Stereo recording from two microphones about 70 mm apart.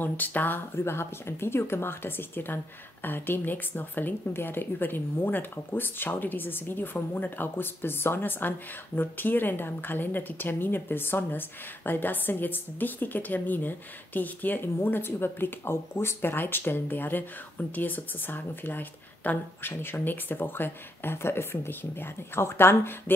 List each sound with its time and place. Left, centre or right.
0.0 s speech: left